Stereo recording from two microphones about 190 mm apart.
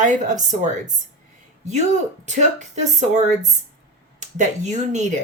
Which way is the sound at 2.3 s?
40° right (ahead or behind).